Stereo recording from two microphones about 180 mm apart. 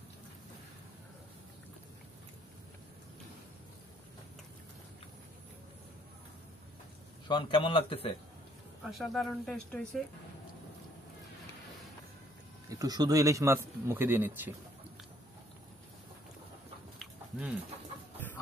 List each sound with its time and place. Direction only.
7.2 s a man's voice: 25° left (ahead or behind)
8.9 s speech: centre (ahead or behind)
12.6 s speech: 20° right (ahead or behind)
17.0 s a sound: 5° right (ahead or behind)